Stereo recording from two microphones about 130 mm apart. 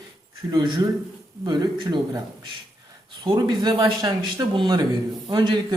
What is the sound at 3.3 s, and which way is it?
A man's voice, 35° right (ahead or behind).